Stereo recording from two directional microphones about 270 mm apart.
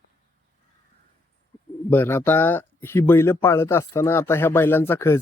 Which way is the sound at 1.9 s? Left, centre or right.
Centre.